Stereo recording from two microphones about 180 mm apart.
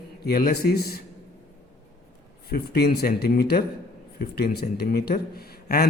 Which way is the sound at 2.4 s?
65° left (ahead or behind).